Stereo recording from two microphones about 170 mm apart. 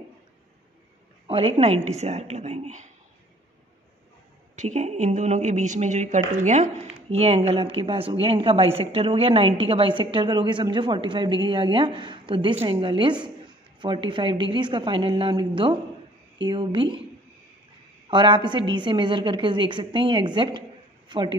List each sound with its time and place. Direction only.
1.2 s speech: 35° right (ahead or behind)
4.6 s a woman's voice: 40° right (ahead or behind)
18.1 s a woman's voice: 25° right (ahead or behind)